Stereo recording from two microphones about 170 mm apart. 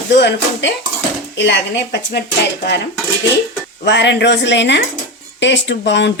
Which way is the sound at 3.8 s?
90° left.